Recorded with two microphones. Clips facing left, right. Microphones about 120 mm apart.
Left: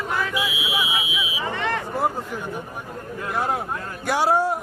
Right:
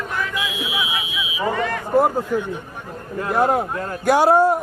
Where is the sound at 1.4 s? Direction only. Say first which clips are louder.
Right 5 dB; 45° right (ahead or behind).